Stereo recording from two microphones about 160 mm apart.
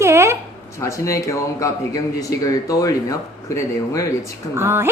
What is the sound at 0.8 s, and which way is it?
Speech, 20° left (ahead or behind).